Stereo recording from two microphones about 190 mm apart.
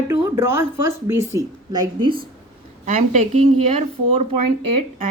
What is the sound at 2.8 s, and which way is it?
Speech, 40° right (ahead or behind).